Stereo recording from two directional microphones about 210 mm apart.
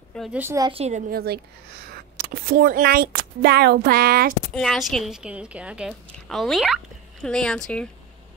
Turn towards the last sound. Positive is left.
turn(degrees=5)  # may be behind; listen again after turning